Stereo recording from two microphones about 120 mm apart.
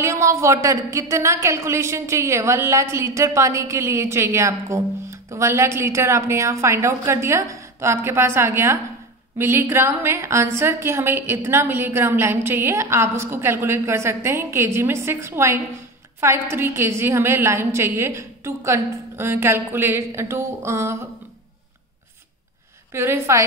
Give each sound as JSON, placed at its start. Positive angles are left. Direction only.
{"t": 0.0, "sound": "a woman's voice", "side_deg": -25}
{"t": 22.9, "sound": "a woman's voice", "side_deg": -20}